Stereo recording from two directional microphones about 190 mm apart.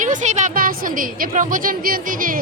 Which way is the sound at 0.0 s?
40° right (ahead or behind).